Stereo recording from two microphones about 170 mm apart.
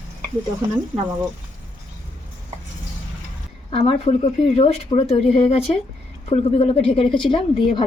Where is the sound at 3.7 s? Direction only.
35° left (ahead or behind).